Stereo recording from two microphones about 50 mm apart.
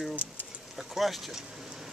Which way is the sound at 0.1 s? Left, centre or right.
Right.